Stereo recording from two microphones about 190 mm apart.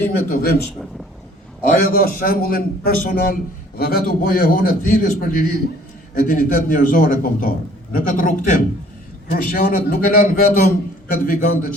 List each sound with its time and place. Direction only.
0.3 s a man's voice: 50° left (ahead or behind)
1.6 s a man's voice: 50° left (ahead or behind)